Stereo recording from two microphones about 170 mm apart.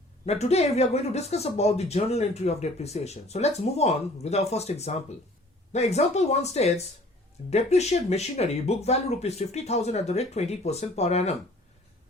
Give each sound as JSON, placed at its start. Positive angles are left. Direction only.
{"t": 0.3, "sound": "speech", "side_deg": 40}